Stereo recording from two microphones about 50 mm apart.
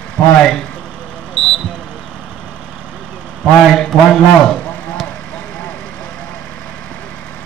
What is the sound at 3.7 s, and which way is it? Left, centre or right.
Speech, centre.